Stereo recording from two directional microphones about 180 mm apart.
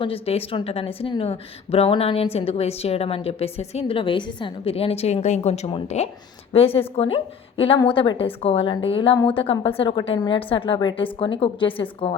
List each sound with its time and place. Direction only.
0.0 s a woman's voice: 30° left (ahead or behind)